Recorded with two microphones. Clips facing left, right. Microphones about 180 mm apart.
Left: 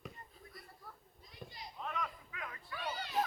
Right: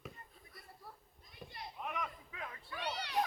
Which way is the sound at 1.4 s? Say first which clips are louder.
Left 1 dB; 5° right (ahead or behind).